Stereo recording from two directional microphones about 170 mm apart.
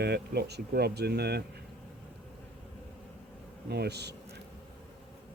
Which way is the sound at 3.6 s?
75° right (ahead or behind).